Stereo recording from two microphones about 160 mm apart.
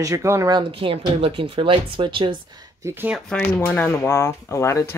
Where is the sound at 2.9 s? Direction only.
10° right (ahead or behind).